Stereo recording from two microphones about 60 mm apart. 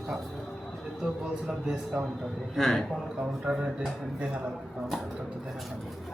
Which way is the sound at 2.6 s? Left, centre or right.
Centre.